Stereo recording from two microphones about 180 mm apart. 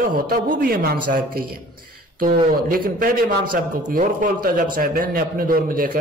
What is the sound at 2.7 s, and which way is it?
A man's voice, 50° right (ahead or behind).